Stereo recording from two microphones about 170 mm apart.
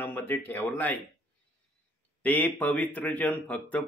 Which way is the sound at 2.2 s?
10° left (ahead or behind).